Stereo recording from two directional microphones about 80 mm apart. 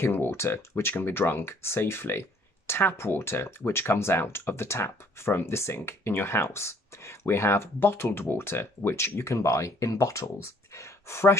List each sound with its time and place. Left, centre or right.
0.0 s speech: left